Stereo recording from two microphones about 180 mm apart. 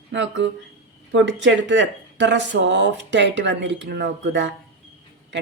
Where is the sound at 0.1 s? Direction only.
85° right.